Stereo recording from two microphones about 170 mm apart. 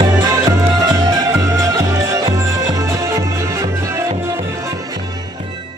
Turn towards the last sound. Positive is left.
turn(degrees=-15)  # may be behind; listen again after turning